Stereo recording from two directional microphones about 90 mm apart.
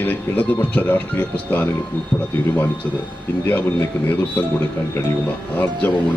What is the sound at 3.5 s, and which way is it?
Speech, 20° left (ahead or behind).